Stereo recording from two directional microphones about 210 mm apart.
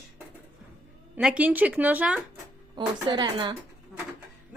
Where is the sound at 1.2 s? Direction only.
5° right (ahead or behind).